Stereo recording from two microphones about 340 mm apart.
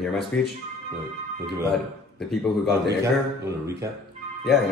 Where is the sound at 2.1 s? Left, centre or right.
Centre.